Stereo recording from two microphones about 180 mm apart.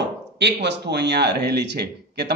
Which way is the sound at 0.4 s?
70° right (ahead or behind).